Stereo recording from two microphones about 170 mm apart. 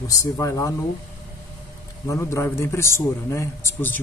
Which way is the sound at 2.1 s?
15° left (ahead or behind).